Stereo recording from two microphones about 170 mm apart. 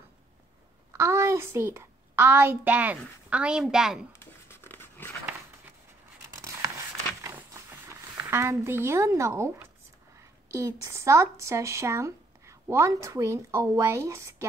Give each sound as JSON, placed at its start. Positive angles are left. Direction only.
{"t": 0.9, "sound": "a child's voice", "side_deg": -15}
{"t": 4.1, "sound": "dog", "side_deg": 15}
{"t": 6.2, "sound": "a sound", "side_deg": -15}
{"t": 10.5, "sound": "speech", "side_deg": -15}